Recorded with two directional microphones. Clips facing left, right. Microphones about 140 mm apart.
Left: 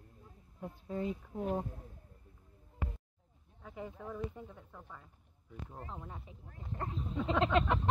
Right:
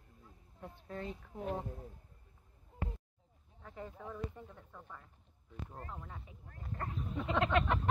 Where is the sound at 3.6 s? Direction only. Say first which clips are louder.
Left 2 dB; 10° left (ahead or behind).